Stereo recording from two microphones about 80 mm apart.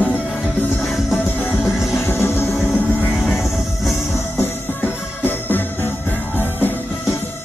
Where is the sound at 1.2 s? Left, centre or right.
Left.